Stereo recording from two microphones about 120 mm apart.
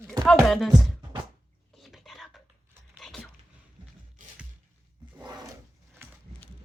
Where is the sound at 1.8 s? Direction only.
Centre (ahead or behind).